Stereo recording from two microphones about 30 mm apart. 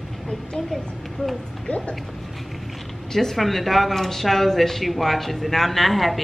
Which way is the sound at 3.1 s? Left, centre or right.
Centre.